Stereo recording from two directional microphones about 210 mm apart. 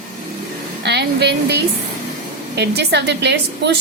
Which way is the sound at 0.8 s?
55° right (ahead or behind).